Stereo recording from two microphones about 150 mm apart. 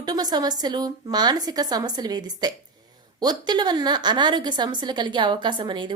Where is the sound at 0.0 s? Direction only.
25° right (ahead or behind).